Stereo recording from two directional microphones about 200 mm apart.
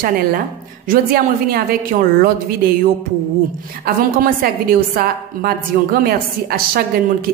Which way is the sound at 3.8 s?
45° right (ahead or behind).